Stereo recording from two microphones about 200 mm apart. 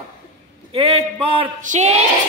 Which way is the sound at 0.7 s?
30° right (ahead or behind).